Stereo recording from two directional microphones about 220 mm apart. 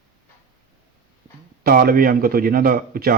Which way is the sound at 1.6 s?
40° right (ahead or behind).